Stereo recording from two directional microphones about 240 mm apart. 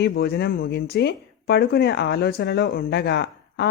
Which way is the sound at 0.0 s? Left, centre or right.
Left.